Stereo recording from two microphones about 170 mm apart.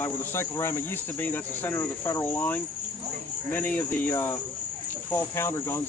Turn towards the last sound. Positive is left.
turn(degrees=15)  # may be behind; listen again after turning